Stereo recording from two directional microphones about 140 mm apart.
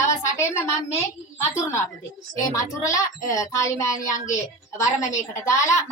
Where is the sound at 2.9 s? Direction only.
25° left (ahead or behind).